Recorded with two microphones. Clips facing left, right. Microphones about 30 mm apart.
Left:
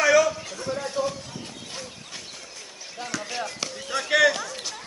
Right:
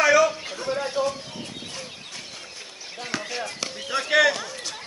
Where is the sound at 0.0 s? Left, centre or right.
Centre.